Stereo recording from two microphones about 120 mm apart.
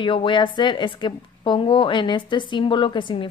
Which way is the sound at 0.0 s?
45° left (ahead or behind).